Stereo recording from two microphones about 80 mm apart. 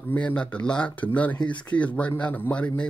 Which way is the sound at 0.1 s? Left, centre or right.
Centre.